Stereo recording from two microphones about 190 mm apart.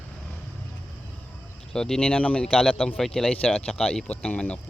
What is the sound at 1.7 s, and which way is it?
Speech, 5° left (ahead or behind).